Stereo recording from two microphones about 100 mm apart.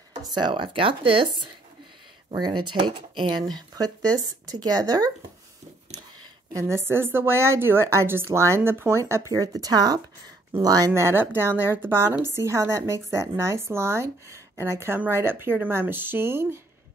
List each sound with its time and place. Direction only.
0.3 s speech: 55° right (ahead or behind)
2.3 s speech: 50° right (ahead or behind)
3.7 s speech: 40° right (ahead or behind)
6.5 s a woman's voice: 30° right (ahead or behind)
10.9 s a woman's voice: 25° right (ahead or behind)